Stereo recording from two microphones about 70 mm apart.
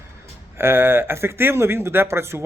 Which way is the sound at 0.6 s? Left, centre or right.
Right.